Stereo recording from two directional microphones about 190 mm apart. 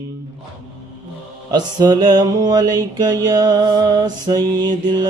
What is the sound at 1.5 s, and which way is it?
Music, 20° right (ahead or behind).